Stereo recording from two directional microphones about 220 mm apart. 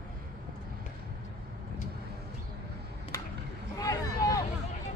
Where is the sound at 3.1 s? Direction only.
15° left (ahead or behind).